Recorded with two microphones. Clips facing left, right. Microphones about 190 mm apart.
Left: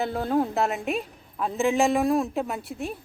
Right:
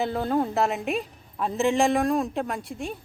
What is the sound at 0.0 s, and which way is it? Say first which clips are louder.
A woman's voice: even; centre (ahead or behind).